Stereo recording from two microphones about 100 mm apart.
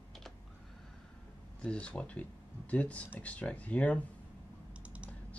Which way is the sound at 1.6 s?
10° left (ahead or behind).